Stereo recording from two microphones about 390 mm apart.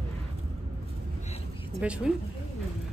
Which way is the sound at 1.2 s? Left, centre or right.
Centre.